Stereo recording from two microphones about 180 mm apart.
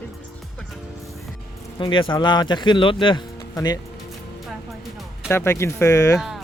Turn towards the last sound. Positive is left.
turn(degrees=15)  # may be behind; listen again after turning